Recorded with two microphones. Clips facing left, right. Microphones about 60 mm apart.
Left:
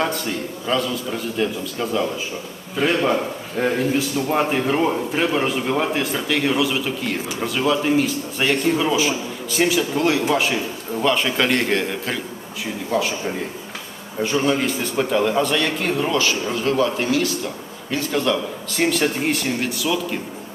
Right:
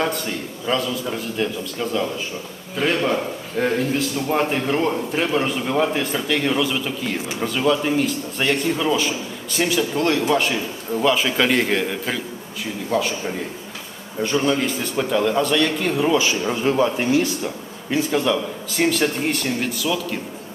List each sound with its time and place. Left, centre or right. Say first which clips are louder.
0.0 s a man's voice: left 1 dB; centre
16.1 s a man's voice: right 1 dB; centre
17.9 s a man's voice: right 1 dB; centre